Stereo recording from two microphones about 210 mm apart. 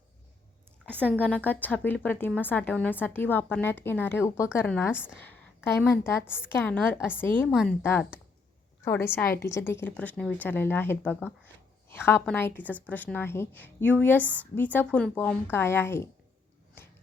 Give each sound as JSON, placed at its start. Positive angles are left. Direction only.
{"t": 1.5, "sound": "a woman's voice", "side_deg": 10}
{"t": 9.2, "sound": "a woman's voice", "side_deg": 45}
{"t": 9.5, "sound": "a woman's voice", "side_deg": 10}